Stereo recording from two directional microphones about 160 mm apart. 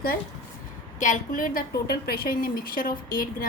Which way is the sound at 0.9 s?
55° left (ahead or behind).